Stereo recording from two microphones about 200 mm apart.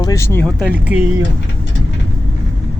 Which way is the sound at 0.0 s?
15° left (ahead or behind).